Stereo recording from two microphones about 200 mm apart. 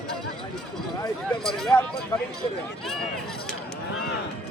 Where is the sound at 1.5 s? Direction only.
Centre (ahead or behind).